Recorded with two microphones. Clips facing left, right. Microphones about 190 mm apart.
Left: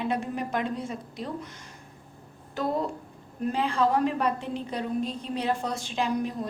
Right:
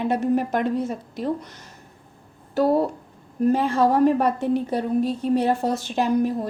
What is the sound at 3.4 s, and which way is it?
A woman's voice, 45° right (ahead or behind).